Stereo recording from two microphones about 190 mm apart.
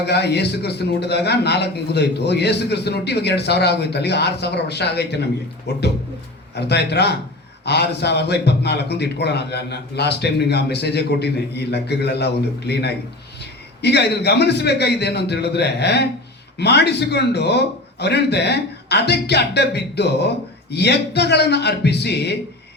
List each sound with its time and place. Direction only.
0.0 s a man's voice: 60° left (ahead or behind)